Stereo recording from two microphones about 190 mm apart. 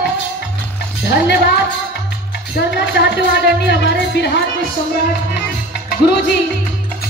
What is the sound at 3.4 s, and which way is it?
Speech, 65° left (ahead or behind).